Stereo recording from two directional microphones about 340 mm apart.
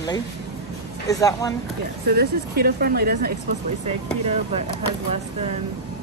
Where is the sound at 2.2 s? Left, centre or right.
Right.